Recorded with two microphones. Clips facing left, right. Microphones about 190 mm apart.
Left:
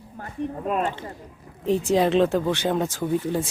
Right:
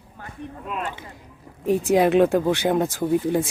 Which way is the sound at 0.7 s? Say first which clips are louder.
Left 5 dB; 45° left (ahead or behind).